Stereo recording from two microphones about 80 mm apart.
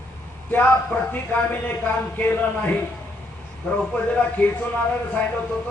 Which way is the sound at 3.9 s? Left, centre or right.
Centre.